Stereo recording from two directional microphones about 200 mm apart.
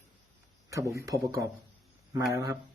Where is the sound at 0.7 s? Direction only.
15° right (ahead or behind).